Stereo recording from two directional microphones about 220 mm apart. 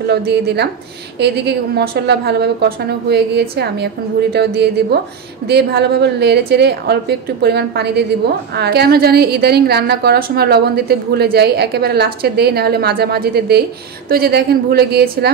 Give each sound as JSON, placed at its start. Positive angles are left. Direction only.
{"t": 0.0, "sound": "a woman's voice", "side_deg": -45}